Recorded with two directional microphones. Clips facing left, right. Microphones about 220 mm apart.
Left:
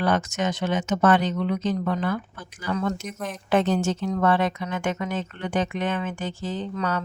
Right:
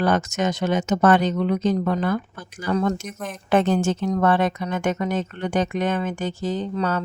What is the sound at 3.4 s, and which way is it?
Speech, 55° right (ahead or behind).